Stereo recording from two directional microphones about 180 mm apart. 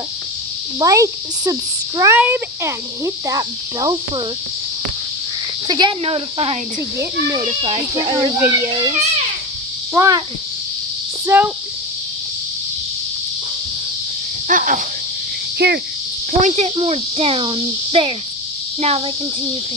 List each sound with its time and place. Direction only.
0.7 s a child's voice: 20° right (ahead or behind)
5.7 s a child's voice: 25° right (ahead or behind)
9.9 s a child's voice: 20° right (ahead or behind)
11.2 s speech: 10° right (ahead or behind)
14.5 s a sound: 45° right (ahead or behind)
15.6 s speech: 60° right (ahead or behind)
16.3 s speech: 40° right (ahead or behind)